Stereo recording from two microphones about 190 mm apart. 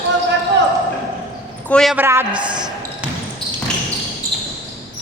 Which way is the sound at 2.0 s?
15° right (ahead or behind).